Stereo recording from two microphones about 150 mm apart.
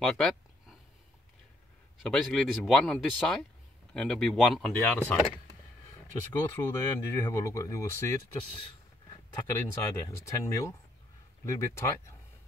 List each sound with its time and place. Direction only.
0.0 s a sound: 5° left (ahead or behind)
2.0 s speech: 5° left (ahead or behind)
6.3 s speech: 20° left (ahead or behind)
9.8 s speech: 20° left (ahead or behind)